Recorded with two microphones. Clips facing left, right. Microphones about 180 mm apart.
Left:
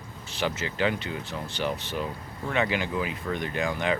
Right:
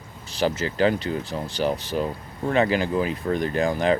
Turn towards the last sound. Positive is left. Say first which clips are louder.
# right 6 dB
turn(degrees=-35)  # may be behind; listen again after turning